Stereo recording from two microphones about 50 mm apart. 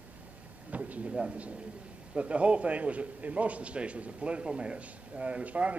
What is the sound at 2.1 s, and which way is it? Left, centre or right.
A man's voice, right.